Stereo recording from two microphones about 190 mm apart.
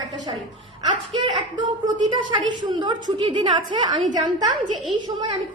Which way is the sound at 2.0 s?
25° right (ahead or behind).